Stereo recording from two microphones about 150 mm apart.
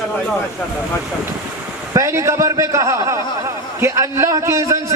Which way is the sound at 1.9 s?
20° right (ahead or behind).